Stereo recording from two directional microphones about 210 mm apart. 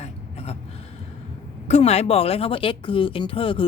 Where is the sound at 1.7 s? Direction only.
30° left (ahead or behind).